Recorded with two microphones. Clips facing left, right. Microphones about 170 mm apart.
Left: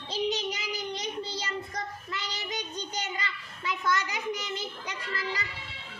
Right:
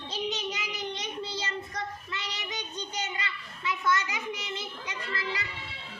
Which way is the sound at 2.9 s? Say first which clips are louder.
Even; 40° left (ahead or behind).